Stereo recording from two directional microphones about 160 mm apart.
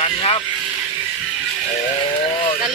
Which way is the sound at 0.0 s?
35° left (ahead or behind).